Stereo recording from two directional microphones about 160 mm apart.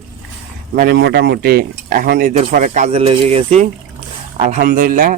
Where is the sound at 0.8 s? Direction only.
80° right; by 2.3 s 65° right (ahead or behind).